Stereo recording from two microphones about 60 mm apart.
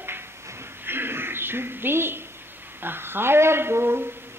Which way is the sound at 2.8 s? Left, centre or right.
Right.